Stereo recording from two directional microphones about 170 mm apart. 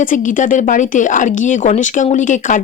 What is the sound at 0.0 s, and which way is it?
Speech, 50° left (ahead or behind).